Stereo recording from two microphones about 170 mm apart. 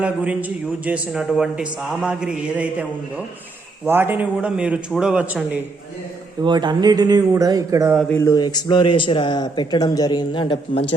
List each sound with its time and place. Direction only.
0.0 s a man's voice: 10° right (ahead or behind)
6.4 s speech: 25° right (ahead or behind)
8.1 s speech: 20° left (ahead or behind)